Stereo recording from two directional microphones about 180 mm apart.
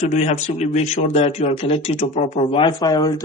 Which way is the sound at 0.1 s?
40° left (ahead or behind).